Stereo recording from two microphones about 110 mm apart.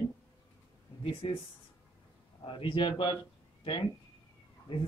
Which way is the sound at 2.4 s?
55° left (ahead or behind).